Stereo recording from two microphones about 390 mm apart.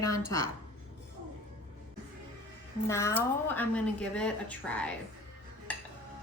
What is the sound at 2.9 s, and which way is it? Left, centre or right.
A woman's voice, centre.